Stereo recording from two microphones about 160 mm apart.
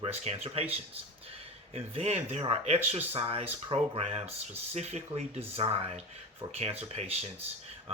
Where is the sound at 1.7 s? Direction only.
35° right (ahead or behind).